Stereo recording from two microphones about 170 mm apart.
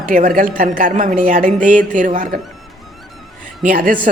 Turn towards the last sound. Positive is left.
turn(degrees=-55)  # may be behind; listen again after turning